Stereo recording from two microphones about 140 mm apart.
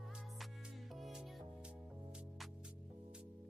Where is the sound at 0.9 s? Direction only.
Centre (ahead or behind).